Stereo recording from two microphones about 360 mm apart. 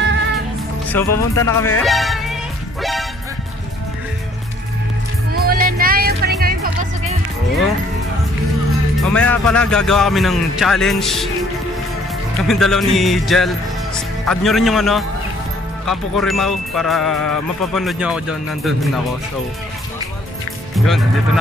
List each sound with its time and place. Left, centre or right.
0.9 s music: centre
5.3 s music: right
9.0 s music: centre
12.4 s music: centre
13.9 s speech: centre
15.8 s music: centre
20.7 s music: centre